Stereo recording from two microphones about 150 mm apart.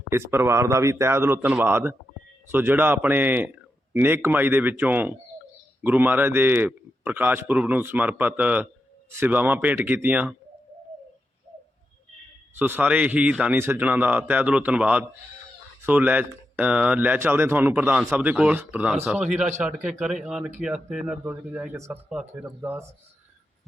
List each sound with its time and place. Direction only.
0.1 s a man's voice: 15° right (ahead or behind)
12.5 s a man's voice: 15° right (ahead or behind)